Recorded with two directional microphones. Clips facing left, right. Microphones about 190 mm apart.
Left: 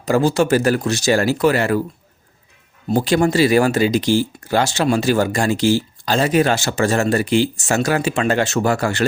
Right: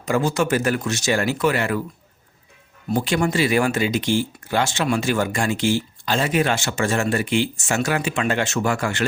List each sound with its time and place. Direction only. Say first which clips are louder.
0.0 s speech: left 5 dB; 35° left (ahead or behind)
2.8 s speech: left 5 dB; 35° left (ahead or behind)